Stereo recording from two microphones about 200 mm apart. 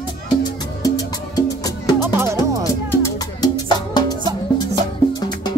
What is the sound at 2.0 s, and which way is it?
Speech, 10° right (ahead or behind).